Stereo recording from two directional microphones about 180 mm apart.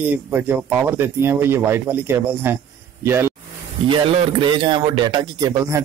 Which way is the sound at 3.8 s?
30° right (ahead or behind).